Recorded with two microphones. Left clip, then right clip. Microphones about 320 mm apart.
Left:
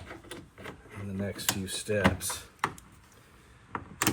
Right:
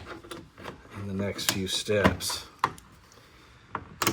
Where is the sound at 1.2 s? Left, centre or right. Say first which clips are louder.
Right 4 dB; centre.